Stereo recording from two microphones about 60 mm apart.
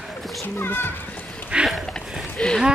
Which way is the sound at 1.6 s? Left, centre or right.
Centre.